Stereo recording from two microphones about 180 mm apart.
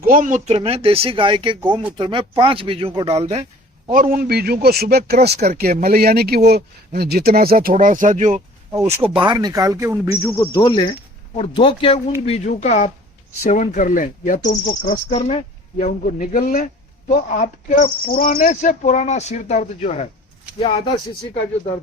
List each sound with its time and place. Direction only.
0.0 s speech: 50° right (ahead or behind)
4.1 s speech: 60° right (ahead or behind); by 8.4 s 45° right (ahead or behind)
8.7 s speech: 15° right (ahead or behind)
9.0 s speech: 25° right (ahead or behind)
10.4 s speech: 25° left (ahead or behind)